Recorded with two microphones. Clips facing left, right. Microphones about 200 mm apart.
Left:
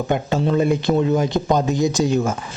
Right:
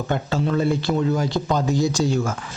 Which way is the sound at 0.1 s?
20° left (ahead or behind).